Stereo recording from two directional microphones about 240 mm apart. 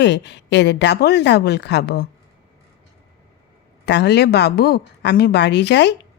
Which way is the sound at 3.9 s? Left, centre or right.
Left.